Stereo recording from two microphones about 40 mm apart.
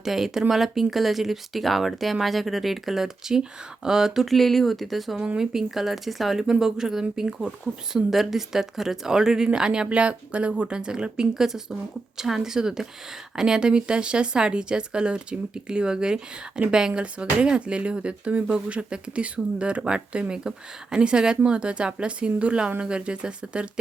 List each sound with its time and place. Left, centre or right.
0.0 s speech: centre
4.3 s speech: centre
5.4 s speech: centre
8.1 s speech: centre; by 10.7 s right
10.7 s speech: right
18.5 s speech: right